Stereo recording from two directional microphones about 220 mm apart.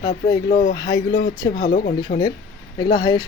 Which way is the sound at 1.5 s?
40° left (ahead or behind).